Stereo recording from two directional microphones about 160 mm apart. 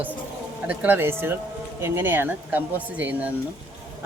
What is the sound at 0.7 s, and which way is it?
A man's voice, 10° right (ahead or behind).